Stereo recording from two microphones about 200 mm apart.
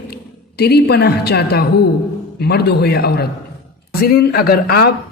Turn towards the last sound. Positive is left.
turn(degrees=50)  # may be behind; listen again after turning